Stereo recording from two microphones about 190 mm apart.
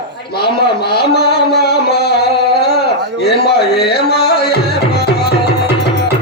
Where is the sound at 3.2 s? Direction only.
60° left (ahead or behind).